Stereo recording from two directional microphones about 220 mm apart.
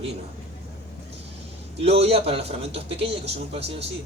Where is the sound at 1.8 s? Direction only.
30° right (ahead or behind).